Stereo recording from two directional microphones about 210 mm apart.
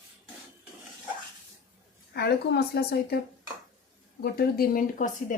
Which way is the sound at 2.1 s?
50° left (ahead or behind).